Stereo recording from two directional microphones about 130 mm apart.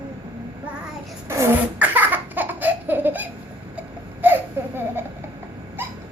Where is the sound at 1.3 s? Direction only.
20° right (ahead or behind).